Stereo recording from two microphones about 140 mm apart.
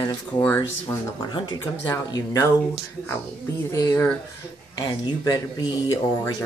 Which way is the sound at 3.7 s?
25° left (ahead or behind).